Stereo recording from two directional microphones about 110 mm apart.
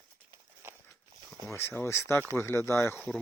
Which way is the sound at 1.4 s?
25° left (ahead or behind).